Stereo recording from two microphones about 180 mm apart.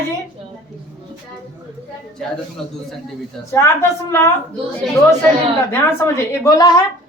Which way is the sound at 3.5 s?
15° left (ahead or behind).